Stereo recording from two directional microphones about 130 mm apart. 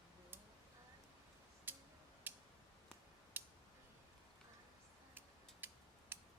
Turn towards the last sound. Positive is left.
turn(degrees=-15)  # may be behind; listen again after turning